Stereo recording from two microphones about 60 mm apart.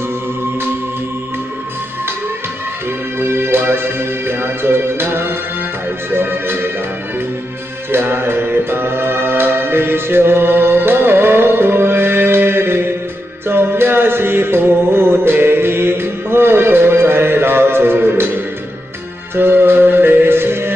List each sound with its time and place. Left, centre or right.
3.2 s music: right
7.9 s music: right